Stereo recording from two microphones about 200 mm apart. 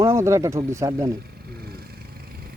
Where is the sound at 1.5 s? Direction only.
50° right (ahead or behind).